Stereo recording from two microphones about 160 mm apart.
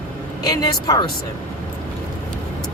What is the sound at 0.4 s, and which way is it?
Speech, 25° left (ahead or behind).